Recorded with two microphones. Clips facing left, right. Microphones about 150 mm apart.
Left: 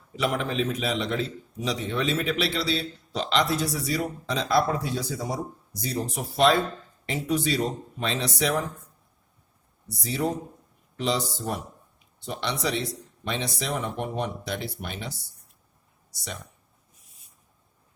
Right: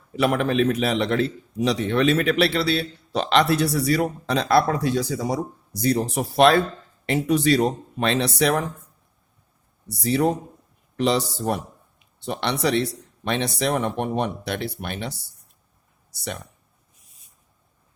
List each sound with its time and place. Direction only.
0.2 s a man's voice: 60° right (ahead or behind)
10.0 s a man's voice: 65° right (ahead or behind)